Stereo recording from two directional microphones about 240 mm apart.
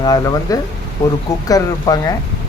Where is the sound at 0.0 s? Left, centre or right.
Centre.